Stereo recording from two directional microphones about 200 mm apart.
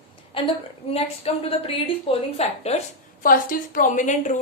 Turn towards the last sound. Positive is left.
turn(degrees=40)  # may be behind; listen again after turning